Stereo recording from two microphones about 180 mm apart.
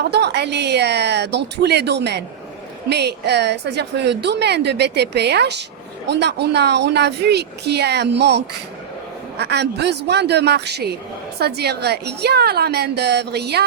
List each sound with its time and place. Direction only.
0.1 s a woman's voice: 70° right (ahead or behind)